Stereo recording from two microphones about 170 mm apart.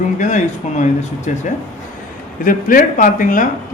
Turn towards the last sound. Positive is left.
turn(degrees=50)  # may be behind; listen again after turning